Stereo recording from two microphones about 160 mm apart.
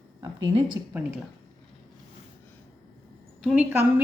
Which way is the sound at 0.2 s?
25° right (ahead or behind).